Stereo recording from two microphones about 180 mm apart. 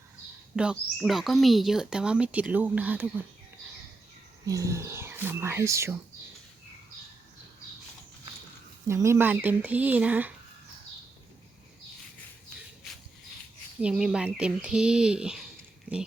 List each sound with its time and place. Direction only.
0.5 s speech: 5° right (ahead or behind)
4.4 s speech: 15° right (ahead or behind)
8.9 s speech: 15° right (ahead or behind)
13.8 s speech: 5° right (ahead or behind)